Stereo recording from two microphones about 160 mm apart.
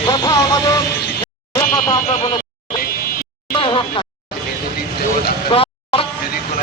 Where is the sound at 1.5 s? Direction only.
20° left (ahead or behind).